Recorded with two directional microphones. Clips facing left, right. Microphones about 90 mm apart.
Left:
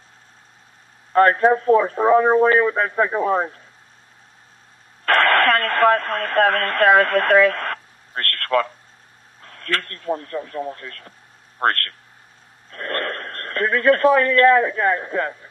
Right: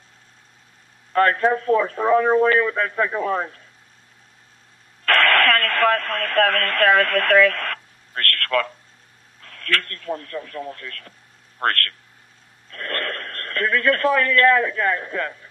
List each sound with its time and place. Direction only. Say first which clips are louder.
1.1 s a man's voice: left 3 dB; 25° left (ahead or behind)
5.0 s a man's voice: left 2 dB; 25° left (ahead or behind)